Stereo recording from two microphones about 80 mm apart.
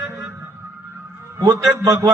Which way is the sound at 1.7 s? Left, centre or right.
Right.